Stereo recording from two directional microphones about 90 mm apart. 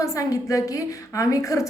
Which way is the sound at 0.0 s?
35° left (ahead or behind).